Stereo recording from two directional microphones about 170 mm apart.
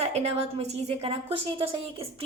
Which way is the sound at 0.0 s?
40° right (ahead or behind).